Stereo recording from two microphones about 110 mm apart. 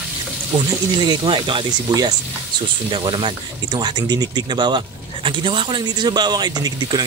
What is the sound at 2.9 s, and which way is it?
Speech, 50° right (ahead or behind).